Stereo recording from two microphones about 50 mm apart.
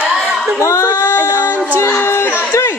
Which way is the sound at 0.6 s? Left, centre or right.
Left.